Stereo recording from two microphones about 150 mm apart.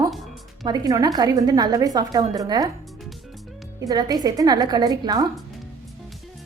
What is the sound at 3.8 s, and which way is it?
A woman's voice, 25° right (ahead or behind).